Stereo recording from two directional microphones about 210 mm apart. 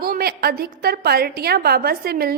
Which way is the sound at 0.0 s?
45° right (ahead or behind).